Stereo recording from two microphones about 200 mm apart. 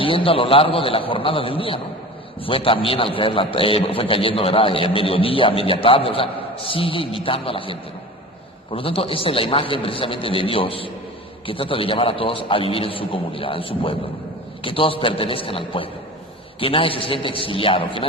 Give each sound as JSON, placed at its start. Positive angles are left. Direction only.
{"t": 0.0, "sound": "a man's voice", "side_deg": 25}